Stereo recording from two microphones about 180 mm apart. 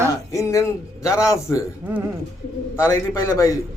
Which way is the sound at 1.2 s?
20° left (ahead or behind).